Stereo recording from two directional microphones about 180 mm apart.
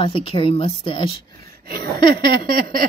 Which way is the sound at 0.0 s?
30° left (ahead or behind).